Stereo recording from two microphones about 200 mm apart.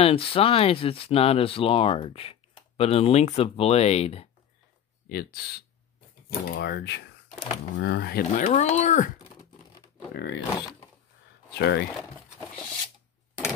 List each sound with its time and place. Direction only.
0.0 s speech: 30° left (ahead or behind)
5.1 s speech: 50° left (ahead or behind)
6.5 s speech: 55° left (ahead or behind)
8.5 s speech: 35° left (ahead or behind)
10.1 s speech: 60° left (ahead or behind)
11.5 s speech: 60° left (ahead or behind)